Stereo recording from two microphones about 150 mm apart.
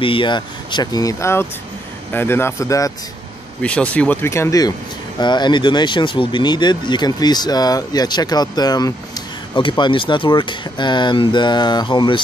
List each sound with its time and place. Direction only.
0.0 s speech: 35° left (ahead or behind)
3.6 s speech: 10° left (ahead or behind); by 12.2 s 30° left (ahead or behind)